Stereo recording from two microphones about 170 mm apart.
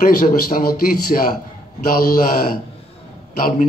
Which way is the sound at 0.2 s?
55° left (ahead or behind).